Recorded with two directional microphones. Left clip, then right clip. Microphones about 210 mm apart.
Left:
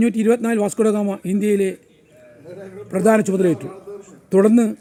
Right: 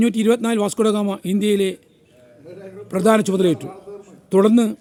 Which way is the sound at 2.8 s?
Centre (ahead or behind).